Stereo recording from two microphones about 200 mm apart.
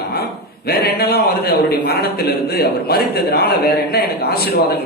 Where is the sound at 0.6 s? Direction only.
50° left (ahead or behind).